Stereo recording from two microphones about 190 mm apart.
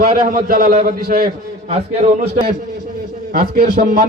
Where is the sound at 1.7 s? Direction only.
35° right (ahead or behind).